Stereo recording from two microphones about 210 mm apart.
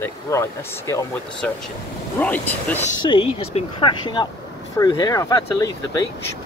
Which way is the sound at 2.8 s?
25° left (ahead or behind).